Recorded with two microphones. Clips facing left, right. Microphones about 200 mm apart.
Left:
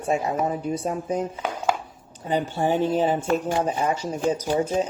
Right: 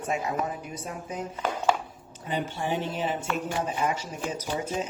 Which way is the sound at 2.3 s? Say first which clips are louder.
Left 6 dB; 40° left (ahead or behind).